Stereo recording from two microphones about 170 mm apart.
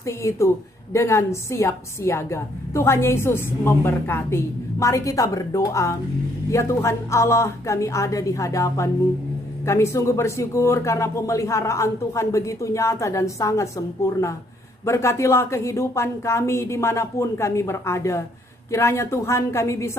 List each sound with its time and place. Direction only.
0.0 s a woman's voice: 15° left (ahead or behind)